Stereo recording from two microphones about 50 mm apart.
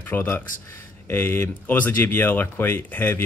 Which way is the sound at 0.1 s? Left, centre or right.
Left.